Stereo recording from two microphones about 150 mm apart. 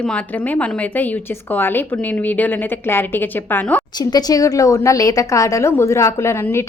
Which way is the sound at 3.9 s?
25° left (ahead or behind).